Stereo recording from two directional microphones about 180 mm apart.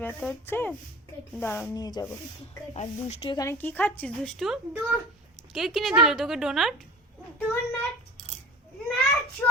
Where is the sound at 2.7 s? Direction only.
35° left (ahead or behind).